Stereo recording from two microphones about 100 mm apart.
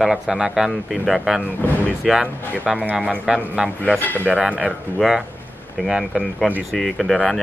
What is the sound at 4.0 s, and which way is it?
Speech, 20° left (ahead or behind).